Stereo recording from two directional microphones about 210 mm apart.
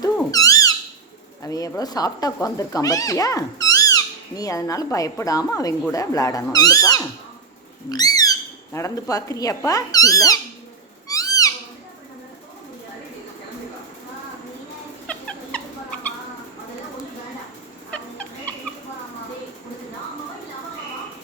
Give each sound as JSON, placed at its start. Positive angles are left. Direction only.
{"t": 0.3, "sound": "squeak", "side_deg": 15}
{"t": 1.4, "sound": "speech", "side_deg": 15}
{"t": 11.1, "sound": "owl", "side_deg": 15}
{"t": 15.0, "sound": "a sound", "side_deg": 5}
{"t": 17.9, "sound": "fowl", "side_deg": 5}